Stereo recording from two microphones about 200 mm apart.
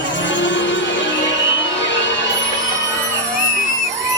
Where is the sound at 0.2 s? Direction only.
65° left (ahead or behind).